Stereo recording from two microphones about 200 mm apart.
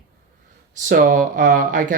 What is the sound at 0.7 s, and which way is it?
Speech, 40° right (ahead or behind).